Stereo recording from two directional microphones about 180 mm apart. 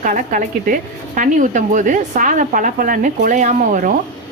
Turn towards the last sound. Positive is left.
turn(degrees=-45)  # may be behind; listen again after turning